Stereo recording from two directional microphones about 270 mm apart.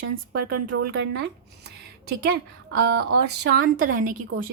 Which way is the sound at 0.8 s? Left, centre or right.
Right.